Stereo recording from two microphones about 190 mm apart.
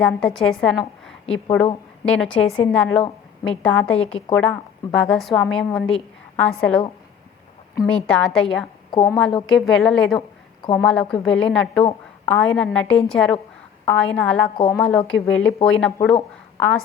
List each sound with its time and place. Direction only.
0.0 s a woman's voice: 5° left (ahead or behind)
3.9 s a woman's voice: 30° left (ahead or behind)
4.4 s a woman's voice: 5° left (ahead or behind)
7.9 s a woman's voice: 5° left (ahead or behind)
10.2 s a sound: 25° left (ahead or behind)
10.8 s a woman's voice: 5° left (ahead or behind)
11.8 s a sound: 25° left (ahead or behind)
12.3 s a woman's voice: 5° left (ahead or behind)